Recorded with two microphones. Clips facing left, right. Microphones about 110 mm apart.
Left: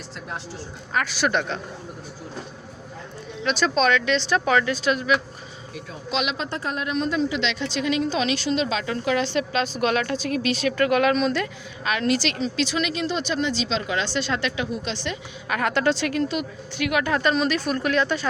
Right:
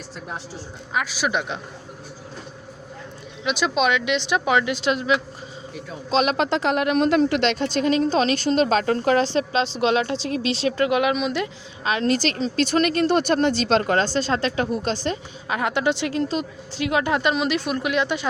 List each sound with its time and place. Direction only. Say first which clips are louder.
0.9 s speech: left 1 dB; 5° right (ahead or behind)
3.4 s speech: even; 15° right (ahead or behind)
6.1 s speech: right 6 dB; 40° right (ahead or behind)
6.3 s speech: right 8 dB; 80° right; by 11.4 s 15° right (ahead or behind)
11.9 s a woman's voice: right 2 dB; 30° right (ahead or behind)
12.1 s speech: right 2 dB; 40° right (ahead or behind)
15.4 s a woman's voice: even; 20° right (ahead or behind)